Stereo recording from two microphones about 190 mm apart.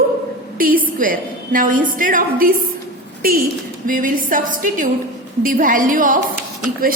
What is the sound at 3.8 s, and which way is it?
A woman's voice, 45° right (ahead or behind).